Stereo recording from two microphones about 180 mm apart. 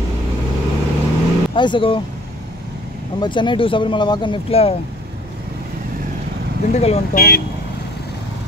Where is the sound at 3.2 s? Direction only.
25° left (ahead or behind).